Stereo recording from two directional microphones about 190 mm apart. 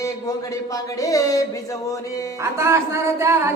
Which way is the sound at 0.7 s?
20° left (ahead or behind).